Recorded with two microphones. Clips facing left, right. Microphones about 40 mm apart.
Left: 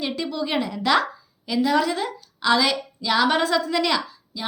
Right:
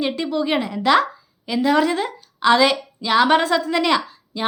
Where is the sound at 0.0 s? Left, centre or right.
Right.